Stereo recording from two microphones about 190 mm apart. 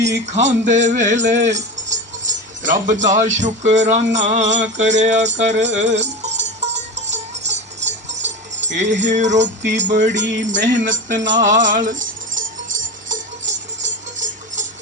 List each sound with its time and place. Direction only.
0.3 s music: 35° right (ahead or behind)